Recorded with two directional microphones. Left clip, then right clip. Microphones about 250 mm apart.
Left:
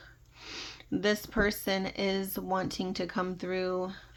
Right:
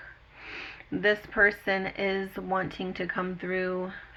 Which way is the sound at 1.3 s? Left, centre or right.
Left.